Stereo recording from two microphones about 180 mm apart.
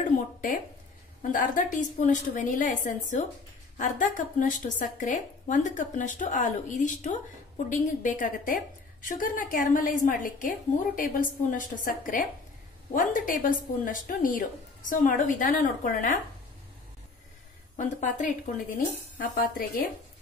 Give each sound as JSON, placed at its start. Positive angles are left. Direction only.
{"t": 1.2, "sound": "a woman's voice", "side_deg": 50}
{"t": 17.7, "sound": "a woman's voice", "side_deg": 45}